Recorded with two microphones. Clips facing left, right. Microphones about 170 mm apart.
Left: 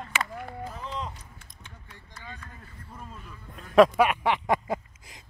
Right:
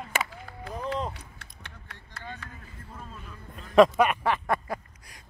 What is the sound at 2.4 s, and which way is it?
Speech, 85° right.